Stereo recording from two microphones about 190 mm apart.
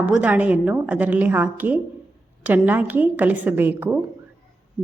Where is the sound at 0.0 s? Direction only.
10° right (ahead or behind).